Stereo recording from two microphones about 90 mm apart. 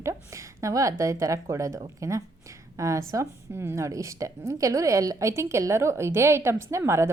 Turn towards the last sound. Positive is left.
turn(degrees=-30)  # may be behind; listen again after turning